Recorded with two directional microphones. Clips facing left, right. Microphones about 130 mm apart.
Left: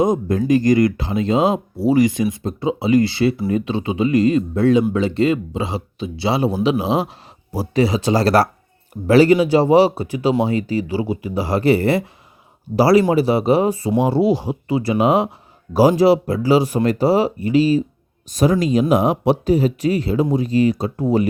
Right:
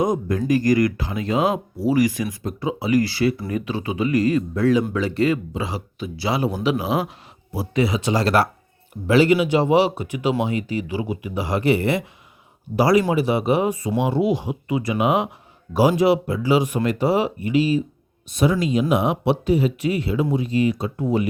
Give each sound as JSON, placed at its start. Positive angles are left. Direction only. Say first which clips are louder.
{"t": 0.0, "sound": "speech", "louder": "left 4 dB", "side_deg": 25}
{"t": 7.5, "sound": "speech", "louder": "left 4 dB", "side_deg": 35}